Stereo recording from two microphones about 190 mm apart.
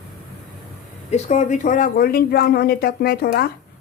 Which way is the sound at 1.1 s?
35° left (ahead or behind).